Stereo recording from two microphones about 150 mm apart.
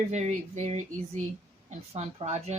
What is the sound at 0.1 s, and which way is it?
Speech, 50° right (ahead or behind).